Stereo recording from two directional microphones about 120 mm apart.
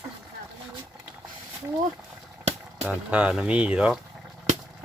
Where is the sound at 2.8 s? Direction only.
10° right (ahead or behind).